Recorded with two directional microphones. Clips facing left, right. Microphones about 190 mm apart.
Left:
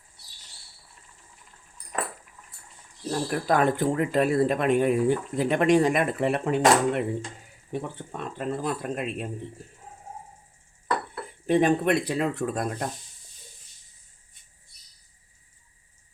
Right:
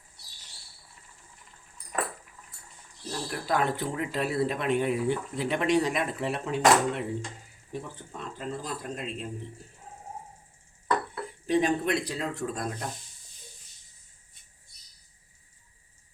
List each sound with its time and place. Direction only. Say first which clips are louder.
3.1 s speech: left 5 dB; 50° left (ahead or behind)
11.4 s speech: left 4 dB; 55° left (ahead or behind)